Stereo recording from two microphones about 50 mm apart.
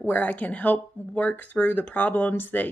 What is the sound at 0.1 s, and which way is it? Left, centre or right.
Speech, left.